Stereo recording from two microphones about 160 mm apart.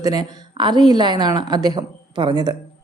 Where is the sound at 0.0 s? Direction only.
25° right (ahead or behind).